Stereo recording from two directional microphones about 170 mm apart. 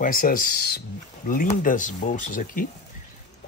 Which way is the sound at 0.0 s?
55° left (ahead or behind).